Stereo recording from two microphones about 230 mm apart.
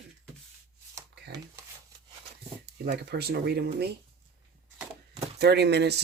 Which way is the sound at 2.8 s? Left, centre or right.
Right.